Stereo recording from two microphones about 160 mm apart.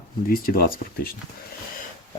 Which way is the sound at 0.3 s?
65° left (ahead or behind).